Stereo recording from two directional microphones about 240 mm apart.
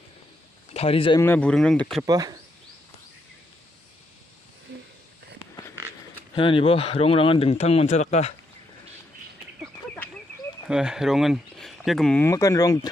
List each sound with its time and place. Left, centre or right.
0.7 s speech: left
1.2 s speech: centre
2.0 s speech: centre
6.3 s speech: left
10.7 s speech: centre